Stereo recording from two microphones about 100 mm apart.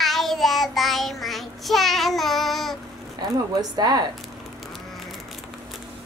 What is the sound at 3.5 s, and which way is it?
Speech, 40° right (ahead or behind).